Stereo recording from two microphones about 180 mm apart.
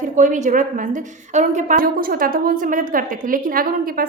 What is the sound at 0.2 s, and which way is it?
A woman's voice, 45° right (ahead or behind).